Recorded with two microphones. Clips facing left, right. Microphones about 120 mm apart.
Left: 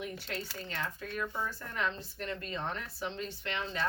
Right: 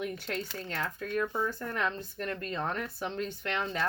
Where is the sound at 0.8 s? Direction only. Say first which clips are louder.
Right 5 dB; 50° right (ahead or behind).